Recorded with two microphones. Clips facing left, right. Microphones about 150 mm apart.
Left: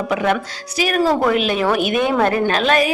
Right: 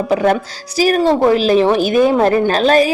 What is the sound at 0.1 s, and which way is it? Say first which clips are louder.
A woman's voice: right 5 dB; 35° right (ahead or behind).